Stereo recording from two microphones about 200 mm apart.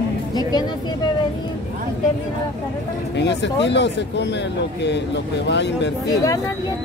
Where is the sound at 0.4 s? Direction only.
20° left (ahead or behind).